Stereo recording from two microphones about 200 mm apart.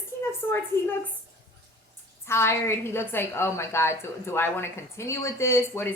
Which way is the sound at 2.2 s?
10° left (ahead or behind).